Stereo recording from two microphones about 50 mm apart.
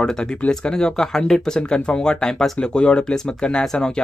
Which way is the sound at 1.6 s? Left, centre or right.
Left.